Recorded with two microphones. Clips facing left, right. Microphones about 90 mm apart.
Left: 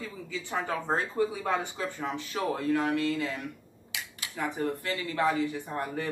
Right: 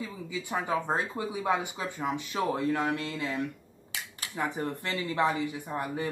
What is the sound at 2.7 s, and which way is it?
Speech, 25° right (ahead or behind).